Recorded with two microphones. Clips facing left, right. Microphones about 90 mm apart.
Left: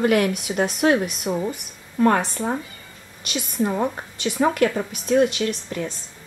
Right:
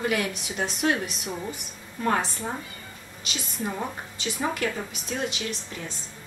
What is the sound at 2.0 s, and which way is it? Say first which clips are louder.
Speech: left 7 dB; 60° left (ahead or behind).